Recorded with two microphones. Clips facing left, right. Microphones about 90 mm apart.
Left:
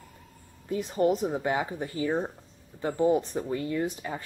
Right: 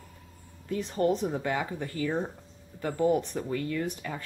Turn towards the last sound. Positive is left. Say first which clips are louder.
# left 2 dB
turn(degrees=20)  # may be behind; listen again after turning